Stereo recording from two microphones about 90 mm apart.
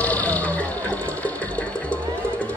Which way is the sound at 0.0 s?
15° left (ahead or behind).